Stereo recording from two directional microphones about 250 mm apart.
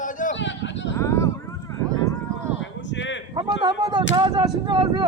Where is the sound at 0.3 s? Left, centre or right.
Left.